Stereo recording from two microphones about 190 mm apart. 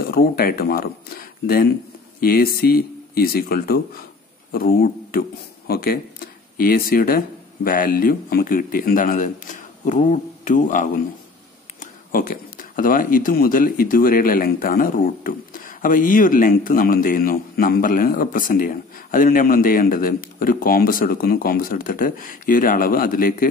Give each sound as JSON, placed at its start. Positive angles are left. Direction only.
{"t": 0.0, "sound": "speech", "side_deg": 50}